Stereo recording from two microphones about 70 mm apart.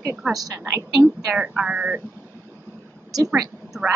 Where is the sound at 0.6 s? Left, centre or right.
Right.